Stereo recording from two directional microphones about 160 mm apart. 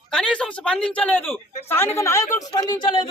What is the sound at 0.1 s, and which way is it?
Speech, 5° left (ahead or behind).